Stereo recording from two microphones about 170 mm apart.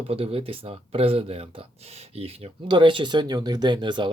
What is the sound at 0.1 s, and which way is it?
Speech, 35° right (ahead or behind).